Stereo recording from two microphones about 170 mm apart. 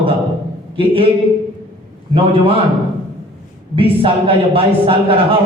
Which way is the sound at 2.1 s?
30° right (ahead or behind).